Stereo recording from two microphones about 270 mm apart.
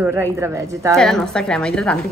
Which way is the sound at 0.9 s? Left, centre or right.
Centre.